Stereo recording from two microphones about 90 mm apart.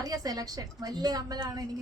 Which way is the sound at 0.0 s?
45° right (ahead or behind).